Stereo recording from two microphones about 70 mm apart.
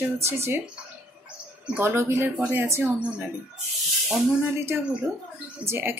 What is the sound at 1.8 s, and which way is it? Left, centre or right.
Speech, right.